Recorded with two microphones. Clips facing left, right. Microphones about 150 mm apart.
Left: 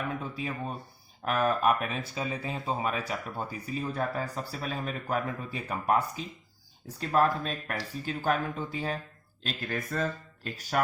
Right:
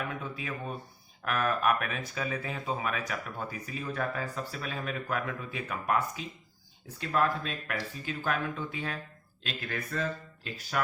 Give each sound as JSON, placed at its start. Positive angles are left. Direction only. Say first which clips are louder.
{"t": 0.1, "sound": "speech", "louder": "left 3 dB", "side_deg": 35}